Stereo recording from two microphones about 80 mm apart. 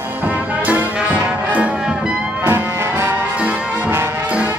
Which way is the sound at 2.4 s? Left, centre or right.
Right.